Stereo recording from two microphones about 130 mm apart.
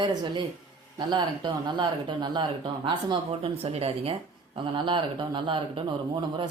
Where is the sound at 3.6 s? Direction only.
50° right (ahead or behind).